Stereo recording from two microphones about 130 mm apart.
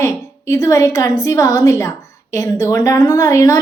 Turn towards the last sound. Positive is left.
turn(degrees=25)  # may be behind; listen again after turning